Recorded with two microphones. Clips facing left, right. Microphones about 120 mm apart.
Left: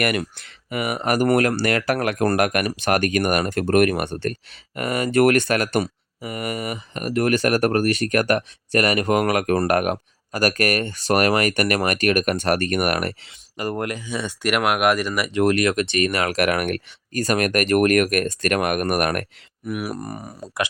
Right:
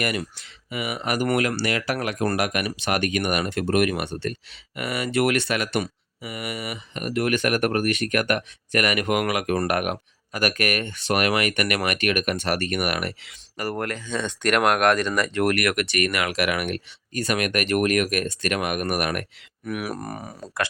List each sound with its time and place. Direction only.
0.0 s speech: 60° left (ahead or behind); by 13.1 s 45° left (ahead or behind)
13.6 s speech: 20° left (ahead or behind)
16.2 s speech: 45° left (ahead or behind)
19.6 s speech: 5° left (ahead or behind)